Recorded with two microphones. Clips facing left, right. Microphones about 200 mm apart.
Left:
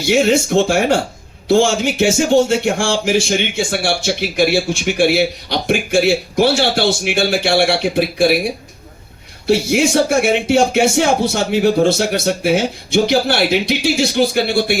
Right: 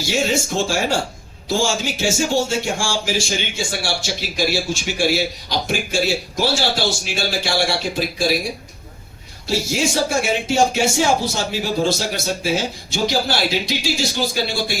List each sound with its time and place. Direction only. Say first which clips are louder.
0.0 s speech: left 7 dB; 60° left (ahead or behind)
9.5 s speech: left 7 dB; 60° left (ahead or behind)